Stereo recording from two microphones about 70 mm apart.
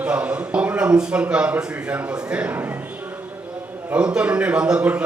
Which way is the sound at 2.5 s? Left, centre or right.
Right.